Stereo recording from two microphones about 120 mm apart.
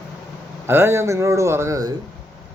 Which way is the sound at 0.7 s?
20° right (ahead or behind).